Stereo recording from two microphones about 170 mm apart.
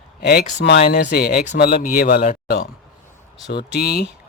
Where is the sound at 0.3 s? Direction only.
80° left; by 2.6 s 55° left (ahead or behind).